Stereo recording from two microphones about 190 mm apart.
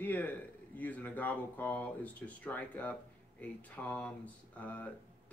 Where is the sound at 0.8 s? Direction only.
10° left (ahead or behind).